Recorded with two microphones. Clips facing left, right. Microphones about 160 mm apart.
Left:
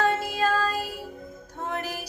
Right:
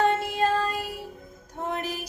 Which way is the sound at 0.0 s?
25° right (ahead or behind).